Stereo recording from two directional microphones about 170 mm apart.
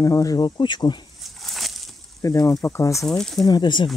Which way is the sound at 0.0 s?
20° left (ahead or behind).